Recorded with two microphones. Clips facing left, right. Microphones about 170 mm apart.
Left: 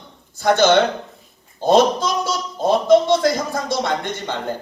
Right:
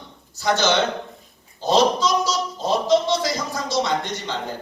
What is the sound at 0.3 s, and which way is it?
A man's voice, 55° left (ahead or behind).